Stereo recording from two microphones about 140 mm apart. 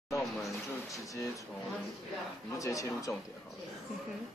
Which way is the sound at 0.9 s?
25° left (ahead or behind).